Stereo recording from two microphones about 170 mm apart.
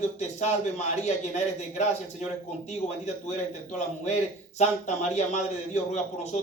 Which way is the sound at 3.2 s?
45° left (ahead or behind).